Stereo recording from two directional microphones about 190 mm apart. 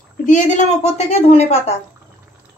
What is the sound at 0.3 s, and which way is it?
Speech, 40° left (ahead or behind).